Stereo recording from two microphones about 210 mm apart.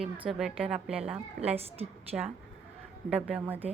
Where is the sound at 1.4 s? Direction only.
30° right (ahead or behind).